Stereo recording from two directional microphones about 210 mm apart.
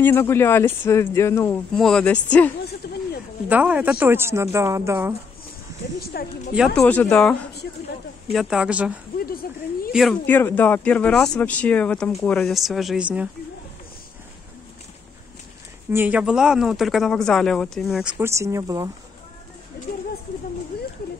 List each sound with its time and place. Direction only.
0.0 s speech: 10° left (ahead or behind)
2.8 s a sound: 50° left (ahead or behind)
3.4 s a woman's voice: 5° right (ahead or behind)
5.9 s a woman's voice: 45° left (ahead or behind)
6.5 s speech: centre (ahead or behind)
9.2 s a sound: 45° left (ahead or behind)
9.9 s speech: 5° left (ahead or behind)
15.9 s speech: 10° right (ahead or behind)